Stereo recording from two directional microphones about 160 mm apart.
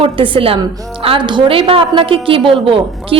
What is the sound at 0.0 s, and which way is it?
A woman's voice, 35° right (ahead or behind).